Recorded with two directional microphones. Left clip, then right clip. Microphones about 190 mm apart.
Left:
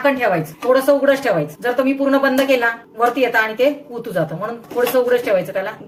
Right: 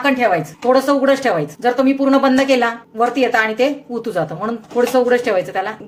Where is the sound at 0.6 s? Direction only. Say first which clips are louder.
Even; 35° right (ahead or behind).